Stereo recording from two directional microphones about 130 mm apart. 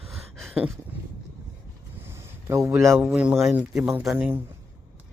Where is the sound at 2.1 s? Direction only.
20° right (ahead or behind).